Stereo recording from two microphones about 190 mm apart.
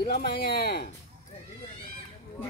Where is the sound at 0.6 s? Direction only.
55° left (ahead or behind).